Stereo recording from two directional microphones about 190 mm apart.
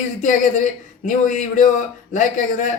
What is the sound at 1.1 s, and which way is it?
A man's voice, 40° left (ahead or behind).